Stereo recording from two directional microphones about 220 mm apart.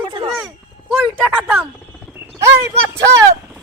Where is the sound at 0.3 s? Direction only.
Centre (ahead or behind).